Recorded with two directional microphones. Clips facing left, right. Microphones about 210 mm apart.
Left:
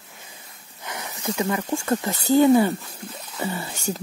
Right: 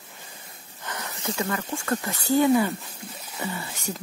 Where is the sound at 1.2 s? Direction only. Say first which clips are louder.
Left 4 dB; 20° left (ahead or behind).